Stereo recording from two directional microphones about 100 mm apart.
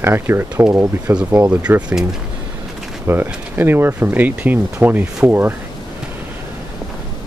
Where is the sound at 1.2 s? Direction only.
15° right (ahead or behind).